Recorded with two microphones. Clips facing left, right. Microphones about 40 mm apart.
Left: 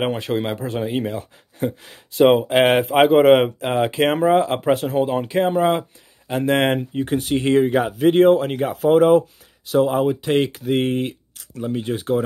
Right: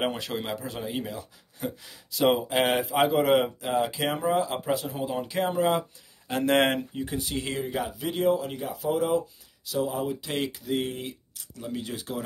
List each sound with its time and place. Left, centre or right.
0.1 s speech: left
2.4 s speech: left
5.3 s speech: left
6.2 s speech: centre
7.0 s speech: left
10.2 s speech: left
10.5 s speech: left
11.6 s speech: left